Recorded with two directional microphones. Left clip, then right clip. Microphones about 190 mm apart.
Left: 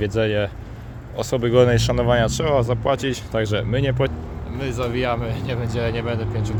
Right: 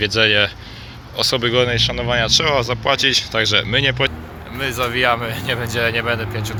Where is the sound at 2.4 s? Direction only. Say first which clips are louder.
Right 2 dB; 15° left (ahead or behind).